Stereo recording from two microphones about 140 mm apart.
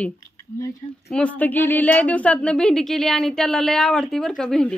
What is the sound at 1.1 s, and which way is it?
Speech, 10° left (ahead or behind).